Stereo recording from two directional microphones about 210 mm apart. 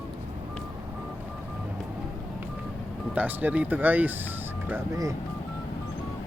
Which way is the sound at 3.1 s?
10° right (ahead or behind).